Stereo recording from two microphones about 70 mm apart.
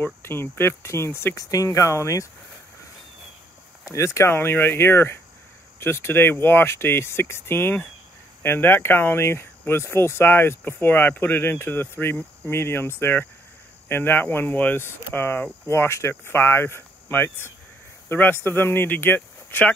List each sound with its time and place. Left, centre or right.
0.0 s speech: left
1.3 s speech: left
3.9 s speech: left